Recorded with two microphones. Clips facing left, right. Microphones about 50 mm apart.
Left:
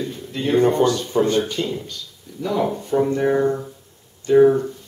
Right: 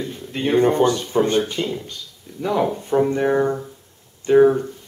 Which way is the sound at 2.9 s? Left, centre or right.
Right.